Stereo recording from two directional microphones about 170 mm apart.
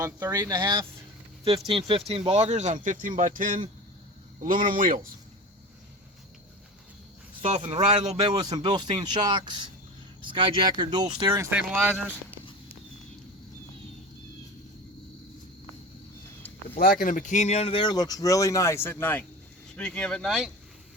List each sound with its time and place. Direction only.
0.0 s speech: 20° right (ahead or behind); by 4.7 s 55° right (ahead or behind)
7.4 s speech: 40° right (ahead or behind)
11.3 s speech: 15° right (ahead or behind)
16.7 s speech: 55° left (ahead or behind); by 20.5 s centre (ahead or behind)